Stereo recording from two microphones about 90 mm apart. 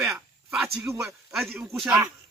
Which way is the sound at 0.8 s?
30° right (ahead or behind).